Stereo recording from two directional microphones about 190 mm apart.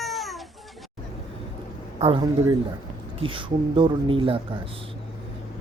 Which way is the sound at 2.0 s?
25° right (ahead or behind).